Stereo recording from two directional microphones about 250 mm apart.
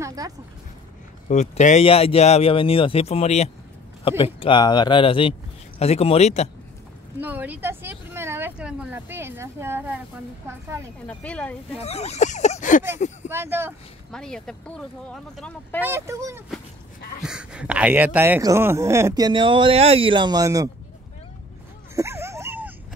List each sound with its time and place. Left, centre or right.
0.0 s speech: centre
1.3 s speech: left
7.2 s speech: centre
11.1 s speech: centre
11.8 s speech: left
13.3 s speech: centre
14.1 s speech: centre
15.8 s speech: centre
21.9 s dog: centre